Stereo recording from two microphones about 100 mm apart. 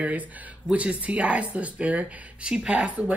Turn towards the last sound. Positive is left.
turn(degrees=-15)  # may be behind; listen again after turning